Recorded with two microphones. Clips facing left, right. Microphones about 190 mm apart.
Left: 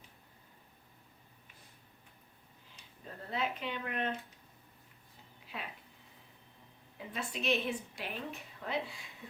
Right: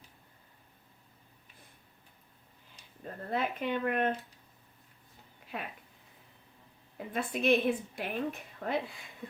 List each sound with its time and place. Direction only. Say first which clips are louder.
3.2 s a woman's voice: right 5 dB; 50° right (ahead or behind)
5.5 s speech: right 5 dB; 55° right (ahead or behind)
6.9 s a woman's voice: right 6 dB; 55° right (ahead or behind)